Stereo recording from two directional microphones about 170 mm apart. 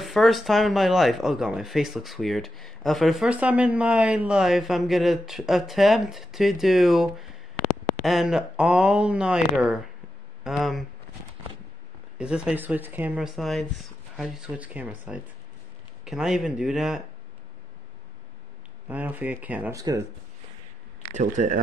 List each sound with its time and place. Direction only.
0.0 s speech: centre (ahead or behind)
12.2 s speech: 5° right (ahead or behind)
18.9 s speech: 10° right (ahead or behind)
21.0 s speech: 45° right (ahead or behind)